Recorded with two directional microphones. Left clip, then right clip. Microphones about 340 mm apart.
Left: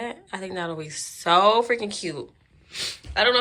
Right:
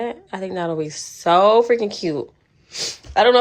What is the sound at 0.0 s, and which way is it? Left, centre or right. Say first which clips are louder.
Speech: right 6 dB; centre.